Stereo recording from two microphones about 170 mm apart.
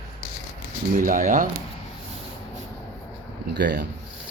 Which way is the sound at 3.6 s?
85° right.